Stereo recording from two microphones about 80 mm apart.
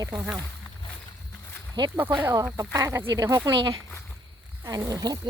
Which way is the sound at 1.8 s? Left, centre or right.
Right.